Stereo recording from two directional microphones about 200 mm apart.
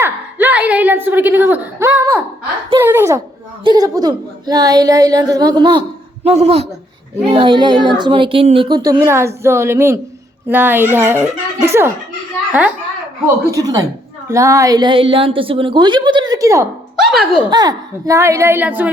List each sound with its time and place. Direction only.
0.0 s a sound: 10° right (ahead or behind)
3.6 s speech: 20° right (ahead or behind)
6.2 s a woman's voice: 30° right (ahead or behind); by 11.9 s 15° right (ahead or behind)
13.2 s a woman's voice: 15° right (ahead or behind)
17.0 s a sound: centre (ahead or behind)
17.5 s a woman's voice: 20° right (ahead or behind)